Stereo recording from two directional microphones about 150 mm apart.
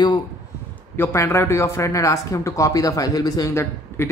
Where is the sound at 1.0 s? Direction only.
15° left (ahead or behind).